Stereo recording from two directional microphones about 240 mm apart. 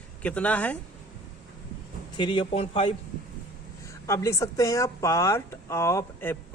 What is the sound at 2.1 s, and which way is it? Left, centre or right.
Speech, centre.